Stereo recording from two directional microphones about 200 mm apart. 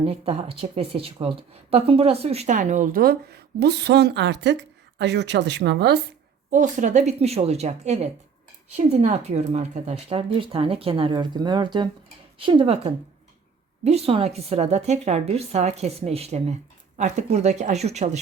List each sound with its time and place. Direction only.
0.0 s a woman's voice: 30° right (ahead or behind); by 6.0 s 60° right (ahead or behind)
6.5 s a woman's voice: 40° right (ahead or behind)